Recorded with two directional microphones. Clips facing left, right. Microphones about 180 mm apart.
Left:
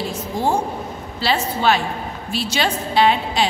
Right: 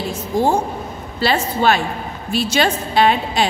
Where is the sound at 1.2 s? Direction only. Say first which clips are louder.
Right 2 dB; 50° right (ahead or behind).